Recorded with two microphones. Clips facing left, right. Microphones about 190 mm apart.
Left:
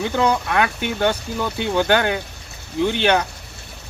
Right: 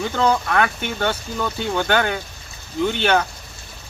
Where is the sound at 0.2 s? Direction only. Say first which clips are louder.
Right 1 dB; 15° left (ahead or behind).